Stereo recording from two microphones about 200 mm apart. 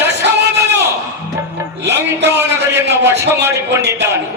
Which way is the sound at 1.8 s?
60° right (ahead or behind).